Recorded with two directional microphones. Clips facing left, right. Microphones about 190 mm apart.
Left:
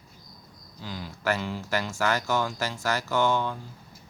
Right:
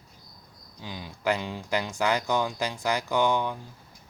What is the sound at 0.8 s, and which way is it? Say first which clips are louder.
Speech: right 1 dB; 15° right (ahead or behind).